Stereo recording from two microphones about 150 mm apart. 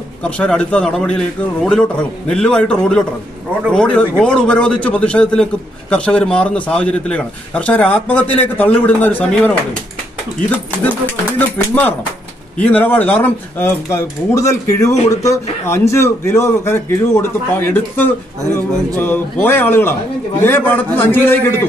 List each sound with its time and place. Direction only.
0.2 s a man's voice: 10° left (ahead or behind)
10.9 s a man's voice: 10° left (ahead or behind)